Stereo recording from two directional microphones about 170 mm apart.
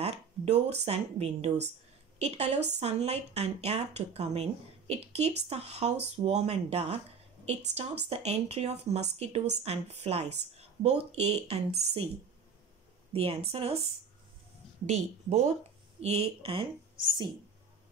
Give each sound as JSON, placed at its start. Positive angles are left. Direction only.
{"t": 0.0, "sound": "speech", "side_deg": -40}
{"t": 13.1, "sound": "speech", "side_deg": -35}
{"t": 14.9, "sound": "a woman's voice", "side_deg": -40}